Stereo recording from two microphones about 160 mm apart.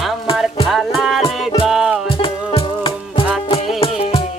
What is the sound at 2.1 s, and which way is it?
Music, 35° left (ahead or behind).